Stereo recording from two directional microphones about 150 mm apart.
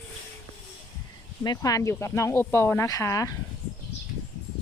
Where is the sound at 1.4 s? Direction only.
25° left (ahead or behind).